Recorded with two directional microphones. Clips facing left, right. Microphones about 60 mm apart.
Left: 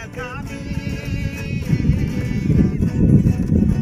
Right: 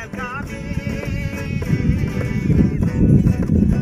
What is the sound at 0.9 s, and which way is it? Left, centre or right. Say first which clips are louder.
Music: right 1 dB; right.